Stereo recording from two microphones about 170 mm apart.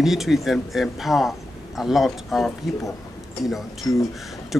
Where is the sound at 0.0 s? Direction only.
Centre (ahead or behind).